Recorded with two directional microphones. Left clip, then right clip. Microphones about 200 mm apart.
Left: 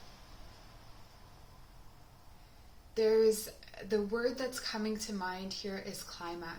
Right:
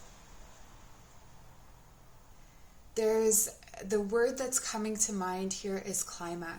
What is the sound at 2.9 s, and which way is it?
Speech, 35° right (ahead or behind).